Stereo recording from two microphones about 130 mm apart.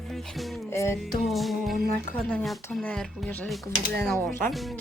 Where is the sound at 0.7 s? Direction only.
20° left (ahead or behind).